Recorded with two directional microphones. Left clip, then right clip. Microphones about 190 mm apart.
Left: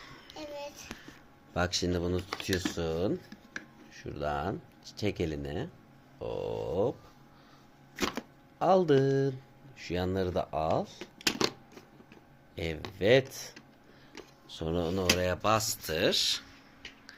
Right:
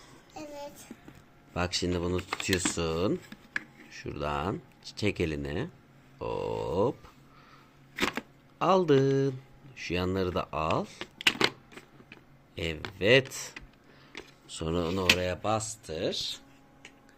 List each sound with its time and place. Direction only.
0.0 s child singing: 10° right (ahead or behind)
1.5 s speech: 5° right (ahead or behind)
8.5 s speech: 10° right (ahead or behind)
12.5 s speech: 10° right (ahead or behind); by 16.4 s 5° left (ahead or behind)